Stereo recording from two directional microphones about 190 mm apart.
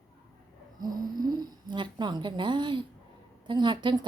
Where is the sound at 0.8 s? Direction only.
20° right (ahead or behind).